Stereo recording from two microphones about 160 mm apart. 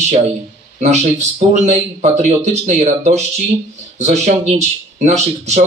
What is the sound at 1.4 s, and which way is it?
Speech, 45° right (ahead or behind).